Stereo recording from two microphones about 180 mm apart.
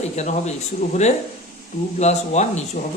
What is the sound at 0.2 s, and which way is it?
Speech, 40° left (ahead or behind).